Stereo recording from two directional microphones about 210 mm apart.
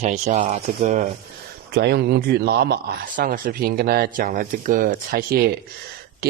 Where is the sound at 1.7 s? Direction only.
50° right (ahead or behind).